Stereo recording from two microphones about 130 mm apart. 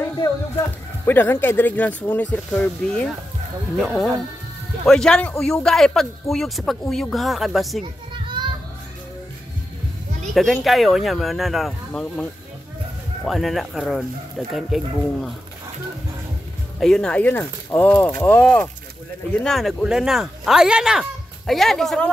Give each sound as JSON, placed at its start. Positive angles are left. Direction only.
{"t": 1.0, "sound": "speech", "side_deg": 15}
{"t": 8.1, "sound": "children playing", "side_deg": -35}
{"t": 10.3, "sound": "speech", "side_deg": 0}
{"t": 16.8, "sound": "speech", "side_deg": 5}